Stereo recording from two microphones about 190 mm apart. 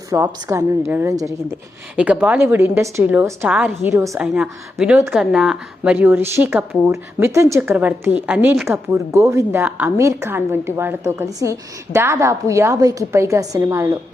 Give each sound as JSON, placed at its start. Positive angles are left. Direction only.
{"t": 0.1, "sound": "speech", "side_deg": -15}